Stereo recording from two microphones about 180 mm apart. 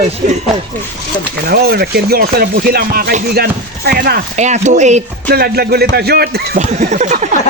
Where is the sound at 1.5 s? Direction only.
60° right (ahead or behind).